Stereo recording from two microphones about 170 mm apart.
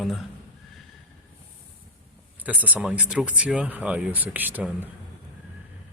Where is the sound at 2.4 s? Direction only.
10° right (ahead or behind).